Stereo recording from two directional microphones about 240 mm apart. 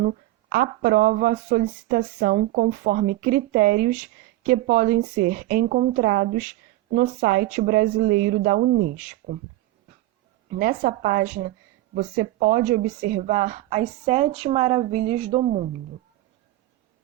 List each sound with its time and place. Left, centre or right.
0.0 s speech: right
10.5 s speech: right